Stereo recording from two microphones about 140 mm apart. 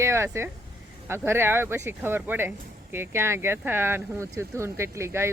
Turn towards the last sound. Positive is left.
turn(degrees=-20)  # may be behind; listen again after turning